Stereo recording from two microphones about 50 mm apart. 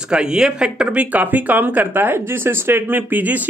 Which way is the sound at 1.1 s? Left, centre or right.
Right.